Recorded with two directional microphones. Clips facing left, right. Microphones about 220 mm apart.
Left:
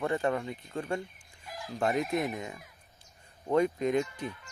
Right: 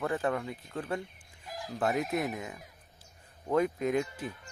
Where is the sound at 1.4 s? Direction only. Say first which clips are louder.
Right 1 dB; 40° right (ahead or behind).